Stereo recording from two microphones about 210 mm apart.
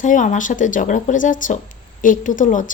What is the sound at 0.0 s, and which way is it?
Speech, 35° left (ahead or behind).